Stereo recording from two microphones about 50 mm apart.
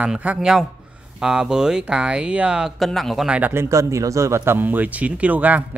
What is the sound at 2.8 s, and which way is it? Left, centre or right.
Speech, centre.